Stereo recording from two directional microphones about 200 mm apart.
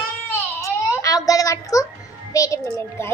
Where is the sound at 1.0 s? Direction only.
15° left (ahead or behind).